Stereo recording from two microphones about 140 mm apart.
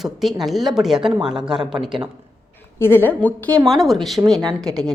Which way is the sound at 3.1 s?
10° left (ahead or behind).